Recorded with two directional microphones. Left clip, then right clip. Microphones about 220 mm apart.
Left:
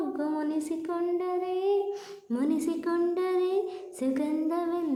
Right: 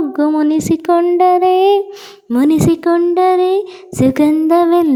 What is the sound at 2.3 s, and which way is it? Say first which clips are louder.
A woman's voice: right 17 dB; 40° right (ahead or behind).